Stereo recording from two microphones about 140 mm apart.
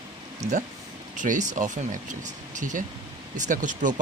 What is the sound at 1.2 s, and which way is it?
Speech, 65° right (ahead or behind).